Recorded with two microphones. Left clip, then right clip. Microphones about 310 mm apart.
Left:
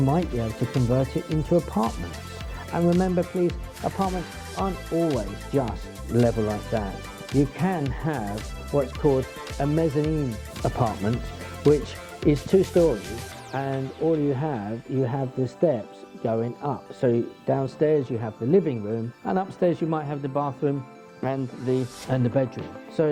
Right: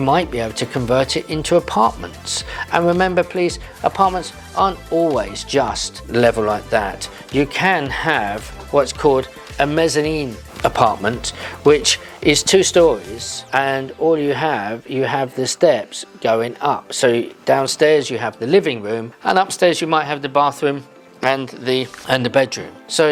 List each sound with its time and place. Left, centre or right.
0.0 s speech: centre
2.9 s speech: centre
8.7 s speech: centre
9.6 s speech: centre